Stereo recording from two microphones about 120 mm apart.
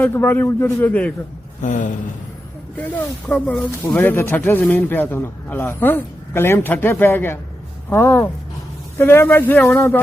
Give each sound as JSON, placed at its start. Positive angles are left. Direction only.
{"t": 0.0, "sound": "speech", "side_deg": 15}
{"t": 1.6, "sound": "a sound", "side_deg": 90}
{"t": 2.7, "sound": "speech", "side_deg": 15}